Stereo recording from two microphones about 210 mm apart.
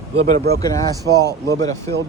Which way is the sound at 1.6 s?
15° left (ahead or behind).